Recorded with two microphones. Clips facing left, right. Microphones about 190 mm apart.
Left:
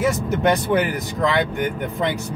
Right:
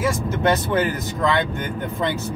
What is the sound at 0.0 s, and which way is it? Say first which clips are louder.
Speech: left 2 dB; 20° left (ahead or behind).